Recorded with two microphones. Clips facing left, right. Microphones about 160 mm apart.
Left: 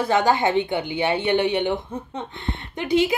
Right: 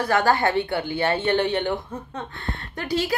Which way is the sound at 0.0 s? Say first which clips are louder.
Left 1 dB; 20° left (ahead or behind).